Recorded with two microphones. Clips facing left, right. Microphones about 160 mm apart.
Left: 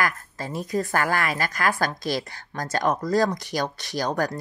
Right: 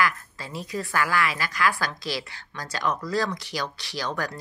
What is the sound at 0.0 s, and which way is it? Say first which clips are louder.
Speech: even; 45° left (ahead or behind).